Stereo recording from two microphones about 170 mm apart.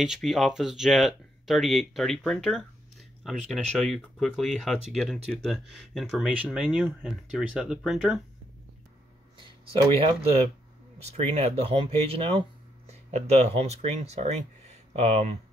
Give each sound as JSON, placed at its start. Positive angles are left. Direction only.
{"t": 0.0, "sound": "speech", "side_deg": 0}
{"t": 9.4, "sound": "speech", "side_deg": -30}